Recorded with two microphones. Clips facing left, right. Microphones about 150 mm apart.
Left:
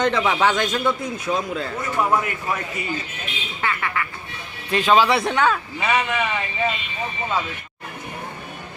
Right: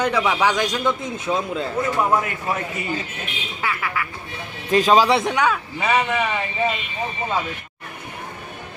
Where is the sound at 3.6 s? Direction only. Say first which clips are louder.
Left 1 dB; 5° right (ahead or behind).